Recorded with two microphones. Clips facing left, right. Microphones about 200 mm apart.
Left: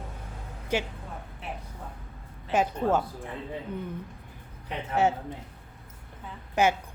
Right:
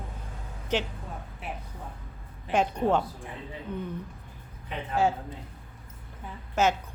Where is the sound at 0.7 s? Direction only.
10° left (ahead or behind).